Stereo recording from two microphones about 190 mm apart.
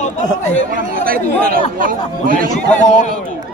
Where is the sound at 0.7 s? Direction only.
50° right (ahead or behind).